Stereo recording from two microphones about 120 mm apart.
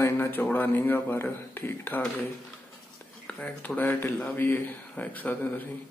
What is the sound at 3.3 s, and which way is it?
Speech, 10° left (ahead or behind).